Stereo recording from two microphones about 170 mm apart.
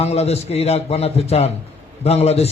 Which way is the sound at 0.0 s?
40° left (ahead or behind).